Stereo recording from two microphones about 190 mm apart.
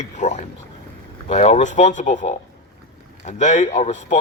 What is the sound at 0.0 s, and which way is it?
Speech, 40° left (ahead or behind).